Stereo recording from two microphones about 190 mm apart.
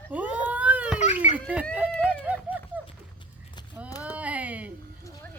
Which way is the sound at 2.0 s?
10° right (ahead or behind).